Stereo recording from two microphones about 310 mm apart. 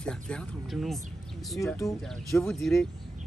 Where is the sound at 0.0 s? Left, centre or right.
Centre.